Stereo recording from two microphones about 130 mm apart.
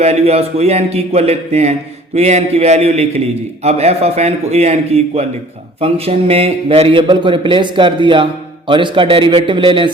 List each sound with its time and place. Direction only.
0.0 s a man's voice: 55° right (ahead or behind)